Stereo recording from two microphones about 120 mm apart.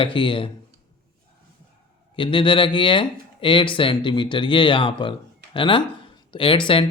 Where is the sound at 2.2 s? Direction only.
45° left (ahead or behind).